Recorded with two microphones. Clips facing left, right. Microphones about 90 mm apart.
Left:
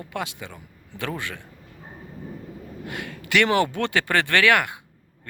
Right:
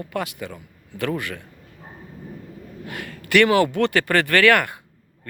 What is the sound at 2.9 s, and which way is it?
Speech, 15° left (ahead or behind).